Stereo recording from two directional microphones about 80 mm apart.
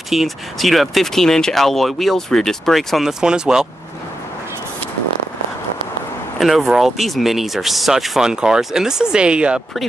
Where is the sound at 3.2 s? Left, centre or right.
Centre.